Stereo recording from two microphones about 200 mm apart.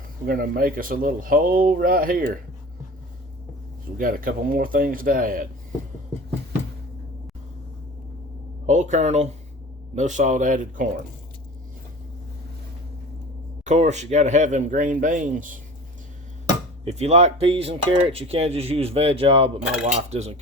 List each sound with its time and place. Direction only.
0.3 s speech: 45° right (ahead or behind)
3.9 s speech: 45° right (ahead or behind)
8.6 s speech: 35° right (ahead or behind)
13.7 s speech: 35° right (ahead or behind)
16.8 s speech: 35° right (ahead or behind)
19.6 s speech: 5° right (ahead or behind)
19.9 s speech: 35° right (ahead or behind)